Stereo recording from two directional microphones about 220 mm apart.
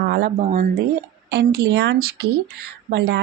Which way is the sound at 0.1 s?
45° right (ahead or behind).